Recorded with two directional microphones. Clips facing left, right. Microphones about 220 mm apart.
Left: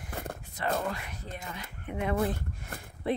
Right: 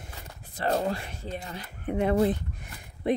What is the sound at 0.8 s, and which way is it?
Speech, 30° right (ahead or behind).